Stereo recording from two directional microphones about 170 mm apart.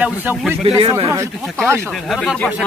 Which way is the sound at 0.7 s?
25° right (ahead or behind).